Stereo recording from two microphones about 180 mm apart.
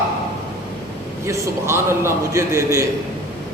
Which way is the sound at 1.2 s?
15° right (ahead or behind).